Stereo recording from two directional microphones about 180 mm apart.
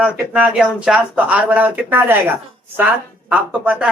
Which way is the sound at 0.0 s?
5° right (ahead or behind).